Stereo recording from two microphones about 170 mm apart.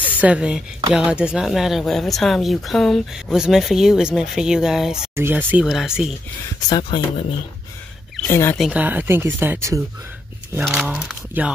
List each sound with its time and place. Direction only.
0.0 s speech: 5° right (ahead or behind)
5.1 s speech: 15° right (ahead or behind)
6.7 s speech: 30° left (ahead or behind)
8.3 s speech: 15° left (ahead or behind)
8.5 s speech: 5° right (ahead or behind)
10.6 s speech: centre (ahead or behind)